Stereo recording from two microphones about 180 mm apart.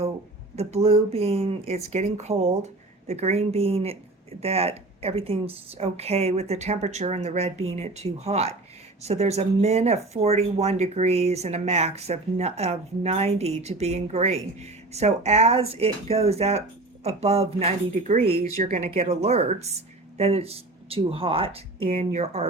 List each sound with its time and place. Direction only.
0.5 s speech: 35° right (ahead or behind)